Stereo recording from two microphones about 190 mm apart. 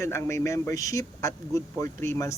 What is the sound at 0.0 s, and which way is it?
Speech, 15° left (ahead or behind).